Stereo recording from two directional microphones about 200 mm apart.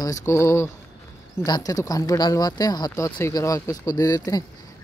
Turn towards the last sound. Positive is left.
turn(degrees=15)  # may be behind; listen again after turning